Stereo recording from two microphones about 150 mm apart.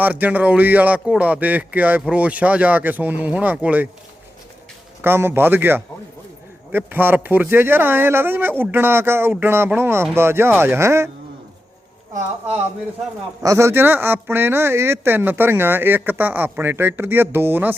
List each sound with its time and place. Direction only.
0.0 s speech: 10° right (ahead or behind)
5.0 s speech: 15° right (ahead or behind)
13.4 s speech: 20° right (ahead or behind)